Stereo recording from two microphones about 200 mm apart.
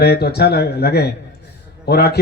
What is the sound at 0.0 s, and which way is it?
A man's voice, 55° left (ahead or behind).